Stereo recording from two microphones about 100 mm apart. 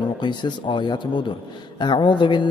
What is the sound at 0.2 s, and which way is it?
Speech, 50° left (ahead or behind).